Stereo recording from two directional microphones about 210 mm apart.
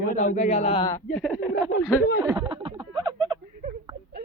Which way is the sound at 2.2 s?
20° right (ahead or behind).